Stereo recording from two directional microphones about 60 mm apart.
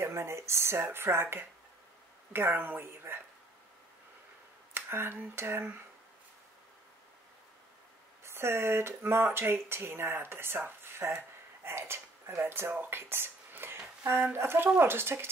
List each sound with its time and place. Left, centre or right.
0.0 s speech: right
4.7 s speech: right
8.2 s speech: right
12.9 s a sound: right
14.0 s speech: right